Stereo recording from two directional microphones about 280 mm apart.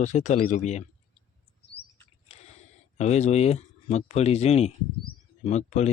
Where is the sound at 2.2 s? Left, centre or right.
Left.